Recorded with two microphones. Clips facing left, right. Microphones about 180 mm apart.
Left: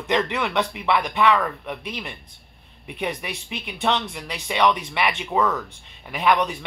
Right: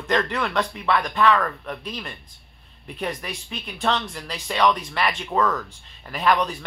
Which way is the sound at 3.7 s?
10° left (ahead or behind).